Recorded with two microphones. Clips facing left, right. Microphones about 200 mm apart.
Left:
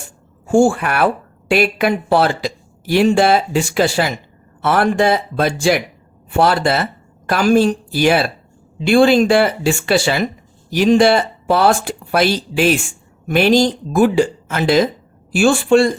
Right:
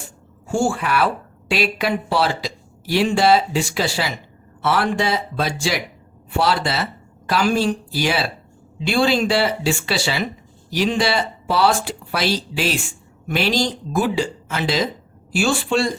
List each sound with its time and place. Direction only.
0.4 s speech: 50° left (ahead or behind)